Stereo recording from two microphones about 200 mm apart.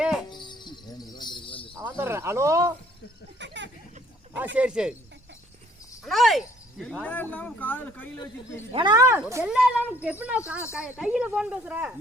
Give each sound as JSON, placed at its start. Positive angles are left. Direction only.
{"t": 0.0, "sound": "cricket", "side_deg": -5}
{"t": 0.3, "sound": "cricket", "side_deg": 20}
{"t": 1.8, "sound": "cricket", "side_deg": -10}
{"t": 3.3, "sound": "a sound", "side_deg": -60}
{"t": 4.5, "sound": "speech", "side_deg": -5}
{"t": 6.1, "sound": "speech", "side_deg": 0}
{"t": 8.7, "sound": "speech", "side_deg": -20}